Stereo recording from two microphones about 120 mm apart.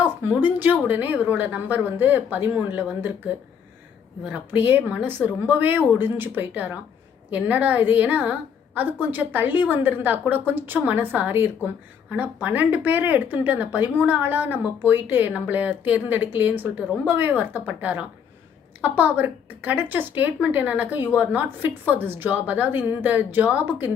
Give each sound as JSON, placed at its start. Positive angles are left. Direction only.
{"t": 0.0, "sound": "a woman's voice", "side_deg": -15}
{"t": 4.3, "sound": "a woman's voice", "side_deg": -15}